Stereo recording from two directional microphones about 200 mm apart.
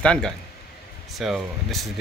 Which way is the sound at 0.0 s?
5° left (ahead or behind).